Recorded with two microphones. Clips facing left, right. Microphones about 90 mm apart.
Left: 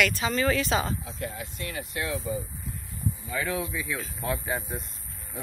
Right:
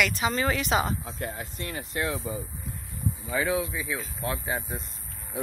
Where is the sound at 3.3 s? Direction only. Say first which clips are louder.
Right 4 dB; 15° right (ahead or behind).